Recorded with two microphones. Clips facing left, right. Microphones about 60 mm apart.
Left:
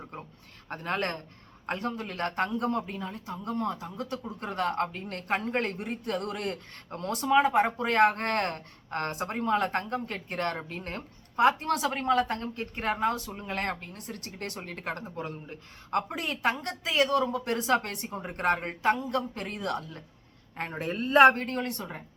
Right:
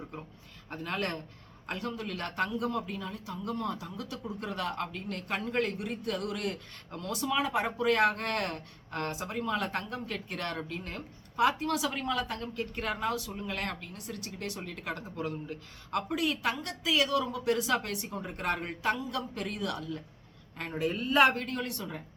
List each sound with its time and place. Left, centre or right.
0.7 s a man's voice: left